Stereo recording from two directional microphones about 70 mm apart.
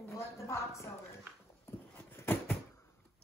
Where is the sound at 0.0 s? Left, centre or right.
Left.